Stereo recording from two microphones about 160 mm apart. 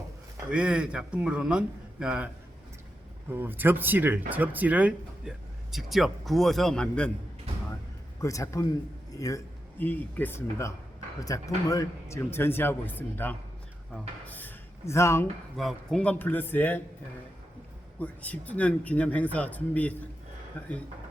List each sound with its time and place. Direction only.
0.5 s a man's voice: 5° right (ahead or behind)
8.2 s a man's voice: 20° left (ahead or behind)
14.3 s a sound: 10° left (ahead or behind)
15.5 s speech: centre (ahead or behind)
18.0 s speech: 10° left (ahead or behind)